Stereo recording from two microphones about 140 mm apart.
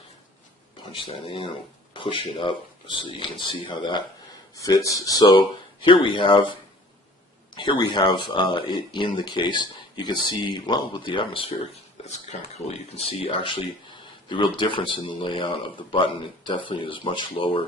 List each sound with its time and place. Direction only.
0.9 s speech: 40° left (ahead or behind)
4.5 s speech: 25° left (ahead or behind)
12.0 s speech: 50° left (ahead or behind)